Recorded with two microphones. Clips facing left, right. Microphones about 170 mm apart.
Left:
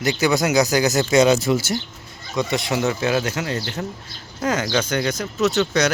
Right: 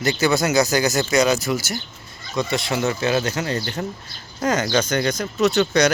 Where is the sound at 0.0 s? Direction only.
15° left (ahead or behind).